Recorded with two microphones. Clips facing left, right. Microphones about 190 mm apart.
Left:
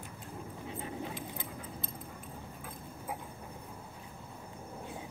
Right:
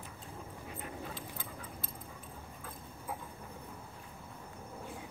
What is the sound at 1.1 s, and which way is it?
Dog, 15° left (ahead or behind).